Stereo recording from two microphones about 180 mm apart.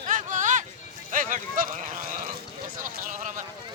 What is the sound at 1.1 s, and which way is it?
Speech, 50° right (ahead or behind).